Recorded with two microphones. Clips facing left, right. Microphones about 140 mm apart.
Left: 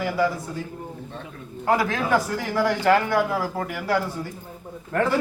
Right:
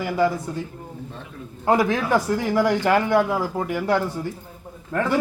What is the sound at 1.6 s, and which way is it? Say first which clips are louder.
A man's voice: right 3 dB; 20° right (ahead or behind).